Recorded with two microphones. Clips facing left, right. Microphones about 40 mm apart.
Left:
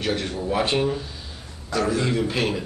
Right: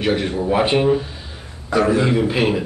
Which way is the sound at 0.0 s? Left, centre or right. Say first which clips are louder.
Right 6 dB; right.